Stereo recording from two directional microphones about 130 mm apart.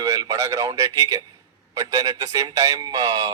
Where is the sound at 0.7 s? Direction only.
25° right (ahead or behind).